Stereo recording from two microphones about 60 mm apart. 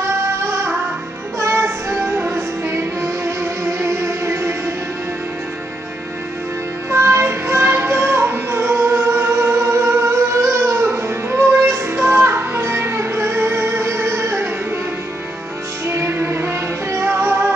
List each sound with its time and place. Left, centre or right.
1.5 s music: right
6.9 s music: right
15.9 s music: right